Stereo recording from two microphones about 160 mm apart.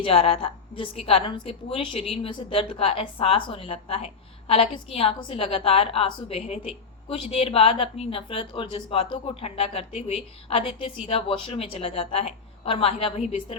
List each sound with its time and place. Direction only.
0.0 s a woman's voice: 35° left (ahead or behind)